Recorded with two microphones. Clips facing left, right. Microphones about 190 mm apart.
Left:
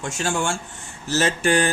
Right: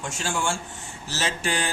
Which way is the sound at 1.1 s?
55° left (ahead or behind).